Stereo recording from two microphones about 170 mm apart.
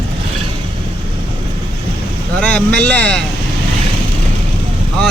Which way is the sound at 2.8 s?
5° left (ahead or behind).